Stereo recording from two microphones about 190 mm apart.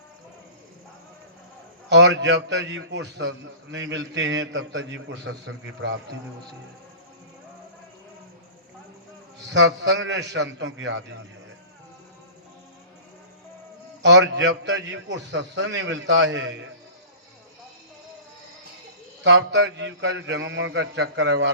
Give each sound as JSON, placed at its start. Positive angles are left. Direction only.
{"t": 1.9, "sound": "a man's voice", "side_deg": -70}
{"t": 9.5, "sound": "a man's voice", "side_deg": -65}
{"t": 14.0, "sound": "a man's voice", "side_deg": -70}
{"t": 19.2, "sound": "a man's voice", "side_deg": -65}